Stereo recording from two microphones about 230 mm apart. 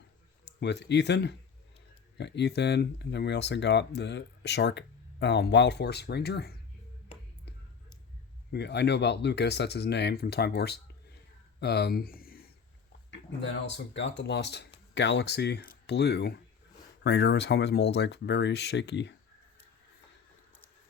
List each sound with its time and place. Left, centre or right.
0.4 s speech: left
8.5 s speech: left
13.1 s speech: left